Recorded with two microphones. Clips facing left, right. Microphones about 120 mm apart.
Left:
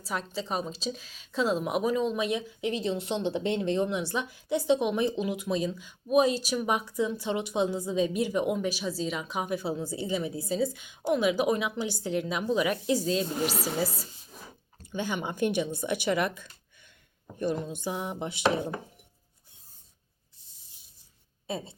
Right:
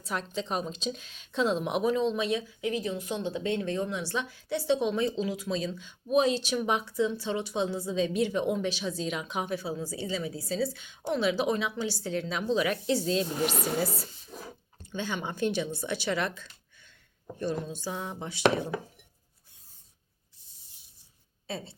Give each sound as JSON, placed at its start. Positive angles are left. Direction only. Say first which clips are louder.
{"t": 0.0, "sound": "a woman's voice", "louder": "even", "side_deg": 0}
{"t": 9.6, "sound": "a woman's voice", "louder": "left 2 dB", "side_deg": 25}
{"t": 13.1, "sound": "speech", "louder": "even", "side_deg": 0}
{"t": 14.9, "sound": "a woman's voice", "louder": "left 2 dB", "side_deg": 10}
{"t": 17.4, "sound": "a woman's voice", "louder": "left 2 dB", "side_deg": 15}
{"t": 21.4, "sound": "speech", "louder": "left 3 dB", "side_deg": 20}